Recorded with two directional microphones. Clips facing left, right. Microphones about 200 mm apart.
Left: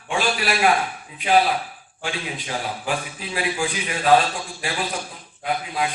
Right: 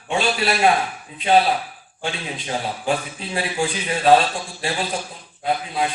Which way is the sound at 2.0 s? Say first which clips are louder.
Right 1 dB; 25° right (ahead or behind).